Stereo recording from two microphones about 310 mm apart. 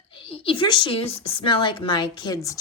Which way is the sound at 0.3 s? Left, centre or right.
Centre.